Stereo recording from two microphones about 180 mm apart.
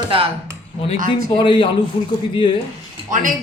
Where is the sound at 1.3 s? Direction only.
25° left (ahead or behind).